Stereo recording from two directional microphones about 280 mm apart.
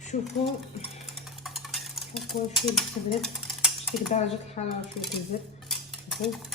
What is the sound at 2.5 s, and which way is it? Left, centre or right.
Speech, centre.